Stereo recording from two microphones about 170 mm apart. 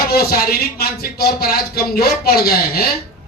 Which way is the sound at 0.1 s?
65° left (ahead or behind).